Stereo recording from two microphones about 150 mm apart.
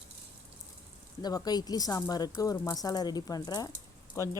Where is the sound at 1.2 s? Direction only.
25° left (ahead or behind).